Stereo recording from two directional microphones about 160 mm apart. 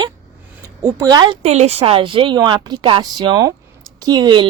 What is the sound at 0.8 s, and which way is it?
Speech, 20° right (ahead or behind).